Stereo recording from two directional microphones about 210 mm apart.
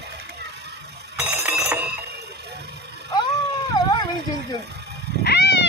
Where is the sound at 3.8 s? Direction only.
20° left (ahead or behind).